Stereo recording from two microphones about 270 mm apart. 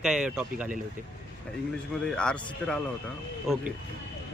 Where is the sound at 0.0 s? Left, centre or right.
Centre.